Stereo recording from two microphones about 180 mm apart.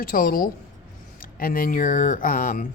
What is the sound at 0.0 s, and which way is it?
Speech, 55° left (ahead or behind).